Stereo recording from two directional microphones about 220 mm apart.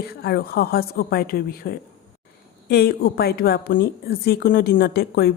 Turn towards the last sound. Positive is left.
turn(degrees=45)  # may be behind; listen again after turning